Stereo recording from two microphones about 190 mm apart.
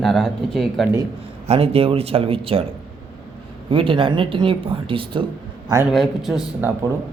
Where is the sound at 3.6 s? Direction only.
30° right (ahead or behind).